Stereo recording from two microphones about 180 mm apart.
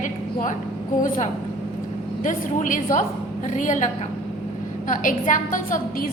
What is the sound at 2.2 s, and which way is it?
A woman's voice, 45° left (ahead or behind).